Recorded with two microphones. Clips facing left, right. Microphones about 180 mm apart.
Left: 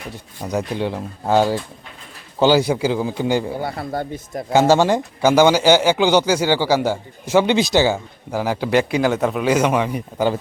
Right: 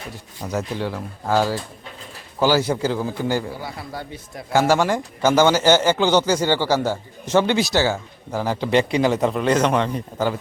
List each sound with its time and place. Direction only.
0.4 s a man's voice: 15° left (ahead or behind)
3.6 s speech: 55° left (ahead or behind)
4.5 s speech: 25° left (ahead or behind)
5.2 s a man's voice: 10° left (ahead or behind)